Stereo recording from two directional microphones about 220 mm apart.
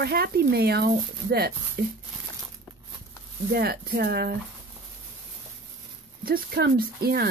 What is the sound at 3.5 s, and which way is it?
Speech, 45° right (ahead or behind).